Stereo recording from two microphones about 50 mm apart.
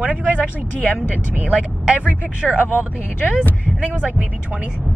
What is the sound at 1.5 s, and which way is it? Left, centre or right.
Speech, right.